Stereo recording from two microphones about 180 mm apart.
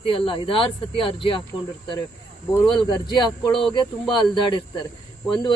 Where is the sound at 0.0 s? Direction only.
30° left (ahead or behind).